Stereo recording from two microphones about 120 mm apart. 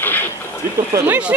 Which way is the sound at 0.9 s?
25° right (ahead or behind).